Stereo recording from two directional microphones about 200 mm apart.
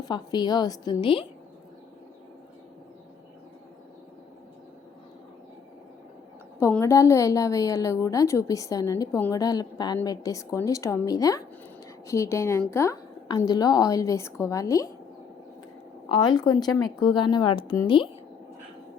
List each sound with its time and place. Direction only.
0.0 s speech: 20° left (ahead or behind)
6.6 s a woman's voice: 10° left (ahead or behind)
16.0 s a woman's voice: 25° left (ahead or behind)